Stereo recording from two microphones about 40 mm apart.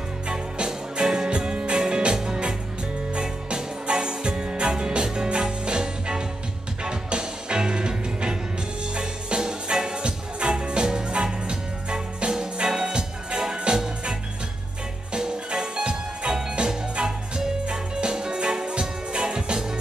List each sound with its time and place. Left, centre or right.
0.3 s music: right
15.1 s music: centre